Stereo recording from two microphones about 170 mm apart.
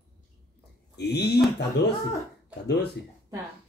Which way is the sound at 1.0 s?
75° left (ahead or behind).